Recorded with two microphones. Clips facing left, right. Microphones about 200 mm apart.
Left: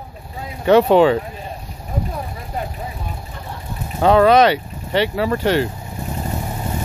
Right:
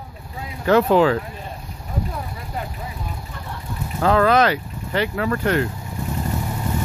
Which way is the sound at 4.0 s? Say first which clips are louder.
Left 4 dB; 20° left (ahead or behind).